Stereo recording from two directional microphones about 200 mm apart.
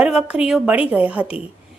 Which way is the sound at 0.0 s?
5° right (ahead or behind).